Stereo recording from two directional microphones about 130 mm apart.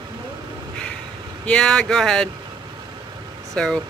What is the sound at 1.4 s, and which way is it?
Speech, 5° left (ahead or behind).